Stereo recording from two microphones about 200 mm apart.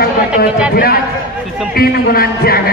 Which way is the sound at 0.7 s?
50° left (ahead or behind).